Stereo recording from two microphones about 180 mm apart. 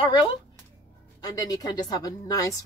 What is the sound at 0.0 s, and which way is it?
A woman's voice, 25° left (ahead or behind).